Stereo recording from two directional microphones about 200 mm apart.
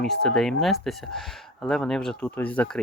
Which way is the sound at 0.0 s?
5° left (ahead or behind).